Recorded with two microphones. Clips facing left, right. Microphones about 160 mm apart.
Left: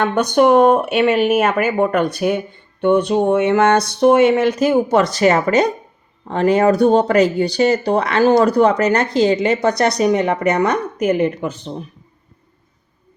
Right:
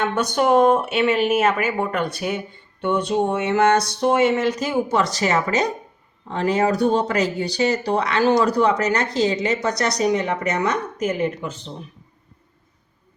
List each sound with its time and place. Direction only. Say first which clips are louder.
0.0 s speech: left 6 dB; 60° left (ahead or behind)